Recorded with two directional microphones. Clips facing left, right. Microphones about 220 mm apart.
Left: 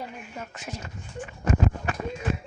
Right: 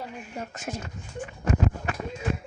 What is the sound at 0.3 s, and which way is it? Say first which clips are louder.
Speech: right 5 dB; 45° right (ahead or behind).